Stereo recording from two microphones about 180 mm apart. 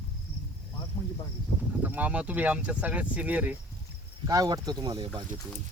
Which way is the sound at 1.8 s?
10° right (ahead or behind).